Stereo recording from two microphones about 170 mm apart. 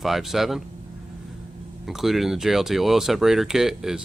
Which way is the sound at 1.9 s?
Centre (ahead or behind).